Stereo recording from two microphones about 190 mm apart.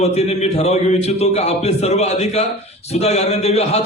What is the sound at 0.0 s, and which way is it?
A man's voice, 35° left (ahead or behind).